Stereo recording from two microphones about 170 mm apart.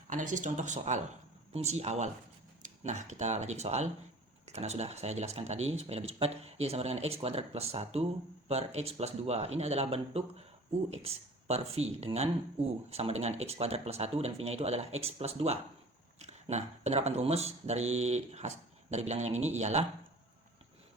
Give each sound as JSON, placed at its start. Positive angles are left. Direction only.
{"t": 0.1, "sound": "speech", "side_deg": -50}